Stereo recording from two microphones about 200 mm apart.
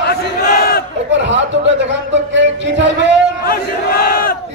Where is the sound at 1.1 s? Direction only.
65° right (ahead or behind).